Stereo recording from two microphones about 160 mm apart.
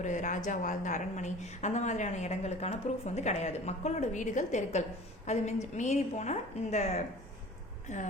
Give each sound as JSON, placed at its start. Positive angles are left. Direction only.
{"t": 0.0, "sound": "a woman's voice", "side_deg": 50}